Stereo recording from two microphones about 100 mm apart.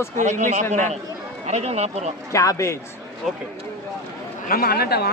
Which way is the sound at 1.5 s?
90° right.